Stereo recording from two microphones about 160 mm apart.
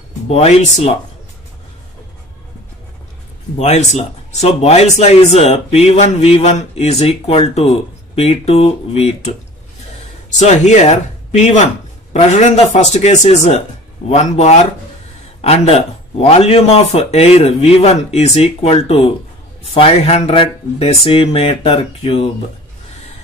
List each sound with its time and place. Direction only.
0.3 s speech: 40° left (ahead or behind)
3.5 s speech: 45° left (ahead or behind)
10.4 s speech: 45° left (ahead or behind)